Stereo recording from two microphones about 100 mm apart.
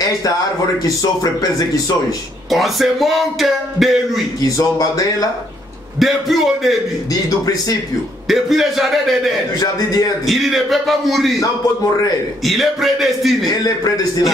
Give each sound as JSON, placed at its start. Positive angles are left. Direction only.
{"t": 0.8, "sound": "a man's voice", "side_deg": 40}
{"t": 2.5, "sound": "speech", "side_deg": 0}
{"t": 4.4, "sound": "a man's voice", "side_deg": 40}
{"t": 5.9, "sound": "speech", "side_deg": 0}
{"t": 8.3, "sound": "speech", "side_deg": 0}
{"t": 9.6, "sound": "a man's voice", "side_deg": 40}
{"t": 10.2, "sound": "speech", "side_deg": 0}
{"t": 12.4, "sound": "speech", "side_deg": 0}